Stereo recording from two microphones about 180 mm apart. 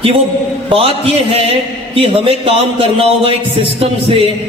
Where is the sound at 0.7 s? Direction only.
30° right (ahead or behind).